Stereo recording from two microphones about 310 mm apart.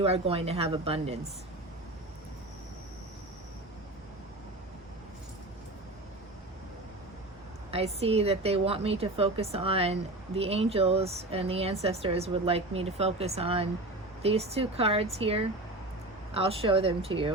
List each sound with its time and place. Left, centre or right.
0.0 s a woman's voice: centre
7.7 s a woman's voice: centre